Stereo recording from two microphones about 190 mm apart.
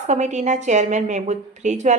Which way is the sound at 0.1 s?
40° right (ahead or behind).